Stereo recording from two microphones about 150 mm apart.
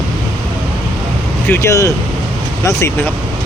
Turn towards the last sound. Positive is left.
turn(degrees=20)  # may be behind; listen again after turning